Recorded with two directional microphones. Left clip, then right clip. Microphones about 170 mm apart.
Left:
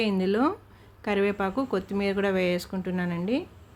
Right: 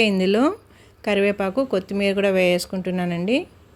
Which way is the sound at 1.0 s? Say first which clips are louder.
Right 6 dB; 5° right (ahead or behind).